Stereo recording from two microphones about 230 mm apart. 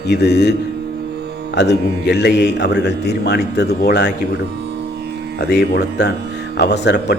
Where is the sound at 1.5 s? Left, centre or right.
Left.